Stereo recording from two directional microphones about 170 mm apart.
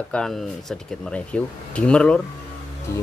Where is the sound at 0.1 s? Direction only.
Centre (ahead or behind).